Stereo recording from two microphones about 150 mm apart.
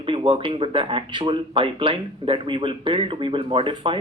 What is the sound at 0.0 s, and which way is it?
Speech, 35° right (ahead or behind).